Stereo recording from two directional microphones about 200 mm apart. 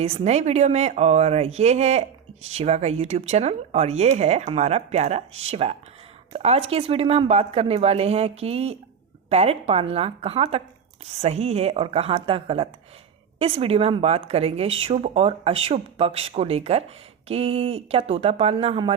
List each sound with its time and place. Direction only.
0.0 s speech: 30° right (ahead or behind)